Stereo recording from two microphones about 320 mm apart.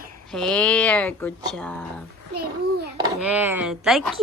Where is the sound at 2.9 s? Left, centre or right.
Centre.